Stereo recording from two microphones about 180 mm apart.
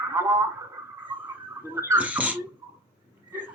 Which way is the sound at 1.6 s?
15° right (ahead or behind).